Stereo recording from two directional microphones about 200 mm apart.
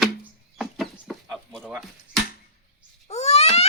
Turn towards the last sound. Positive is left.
turn(degrees=30)  # may be behind; listen again after turning